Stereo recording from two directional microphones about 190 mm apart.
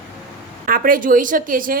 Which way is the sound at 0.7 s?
45° right (ahead or behind).